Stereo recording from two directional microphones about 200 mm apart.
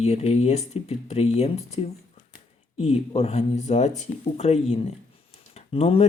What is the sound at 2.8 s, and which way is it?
Speech, 30° left (ahead or behind).